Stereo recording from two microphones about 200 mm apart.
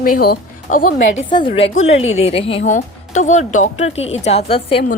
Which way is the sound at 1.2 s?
25° left (ahead or behind).